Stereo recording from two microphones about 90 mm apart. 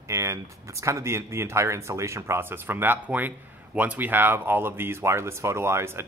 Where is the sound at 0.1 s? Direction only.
35° right (ahead or behind).